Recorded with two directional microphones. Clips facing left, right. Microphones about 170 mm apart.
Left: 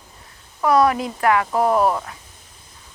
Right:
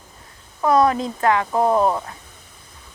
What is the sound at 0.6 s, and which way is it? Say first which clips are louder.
Speech: even; 25° right (ahead or behind).